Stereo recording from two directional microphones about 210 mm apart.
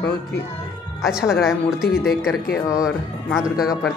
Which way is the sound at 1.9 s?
45° left (ahead or behind).